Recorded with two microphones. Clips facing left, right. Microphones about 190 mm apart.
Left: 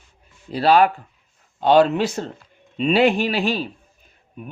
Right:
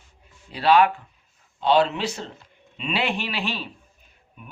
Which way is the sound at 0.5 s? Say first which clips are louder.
Left 2 dB; 40° left (ahead or behind).